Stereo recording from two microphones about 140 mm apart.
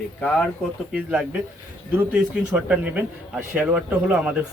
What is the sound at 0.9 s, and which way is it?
Speech, 5° right (ahead or behind).